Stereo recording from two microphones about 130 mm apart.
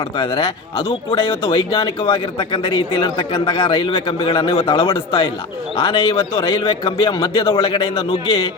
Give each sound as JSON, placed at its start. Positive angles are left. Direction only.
{"t": 0.2, "sound": "a man's voice", "side_deg": 40}